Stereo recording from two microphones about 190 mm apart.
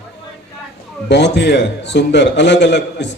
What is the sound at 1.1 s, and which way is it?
A man's voice, 65° left (ahead or behind).